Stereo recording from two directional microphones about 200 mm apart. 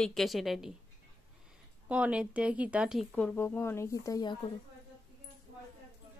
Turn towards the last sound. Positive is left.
turn(degrees=20)  # may be behind; listen again after turning